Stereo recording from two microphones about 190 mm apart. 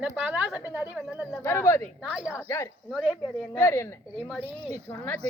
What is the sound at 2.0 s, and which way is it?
Speech, 5° right (ahead or behind).